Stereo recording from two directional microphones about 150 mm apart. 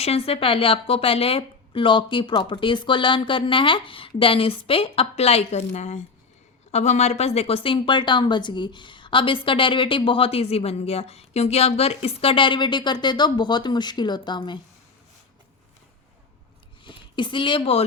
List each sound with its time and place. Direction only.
0.0 s a woman's voice: 40° left (ahead or behind)
16.8 s a woman's voice: 30° left (ahead or behind)